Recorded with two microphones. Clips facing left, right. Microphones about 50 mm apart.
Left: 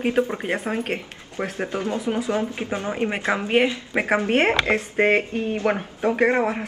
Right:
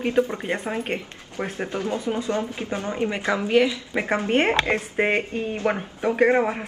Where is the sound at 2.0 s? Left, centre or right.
Centre.